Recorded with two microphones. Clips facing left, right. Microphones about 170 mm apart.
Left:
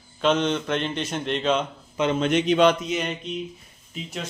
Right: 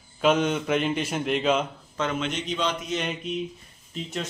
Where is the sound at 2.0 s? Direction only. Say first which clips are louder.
Left 5 dB; 15° left (ahead or behind).